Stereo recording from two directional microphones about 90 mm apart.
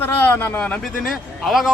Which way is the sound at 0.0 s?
25° left (ahead or behind).